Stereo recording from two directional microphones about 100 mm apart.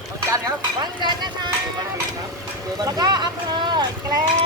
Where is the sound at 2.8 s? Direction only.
45° right (ahead or behind).